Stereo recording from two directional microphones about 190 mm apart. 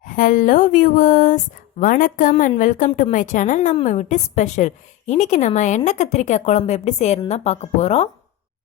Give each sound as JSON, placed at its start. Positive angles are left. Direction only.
{"t": 0.0, "sound": "a woman's voice", "side_deg": 45}